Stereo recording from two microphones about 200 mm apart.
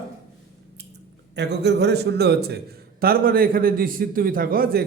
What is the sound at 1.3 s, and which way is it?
A man's voice, 55° right (ahead or behind).